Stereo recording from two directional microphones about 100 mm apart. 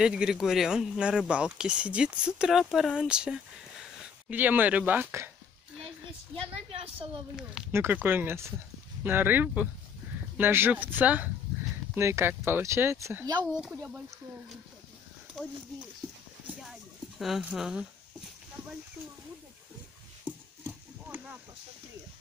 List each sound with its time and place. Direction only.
0.0 s speech: 10° right (ahead or behind)
5.9 s a woman's voice: 65° right (ahead or behind)
7.7 s speech: 20° right (ahead or behind)
13.6 s speech: 5° right (ahead or behind)
17.2 s speech: 5° right (ahead or behind)